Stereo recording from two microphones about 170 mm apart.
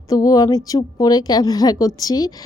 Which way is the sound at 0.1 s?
20° left (ahead or behind).